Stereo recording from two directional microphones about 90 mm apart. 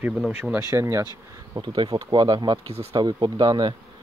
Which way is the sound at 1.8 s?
50° right (ahead or behind).